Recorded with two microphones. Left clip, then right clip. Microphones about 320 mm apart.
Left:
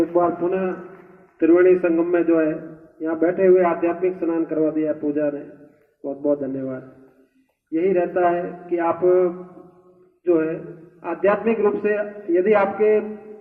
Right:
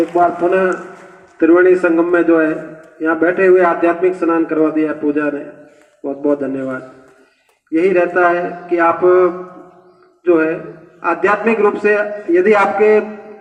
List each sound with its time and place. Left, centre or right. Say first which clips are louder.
0.1 s a man's voice: right 7 dB; right